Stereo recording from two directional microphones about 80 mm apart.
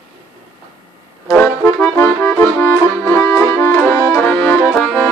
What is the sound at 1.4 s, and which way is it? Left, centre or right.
Accordion, left.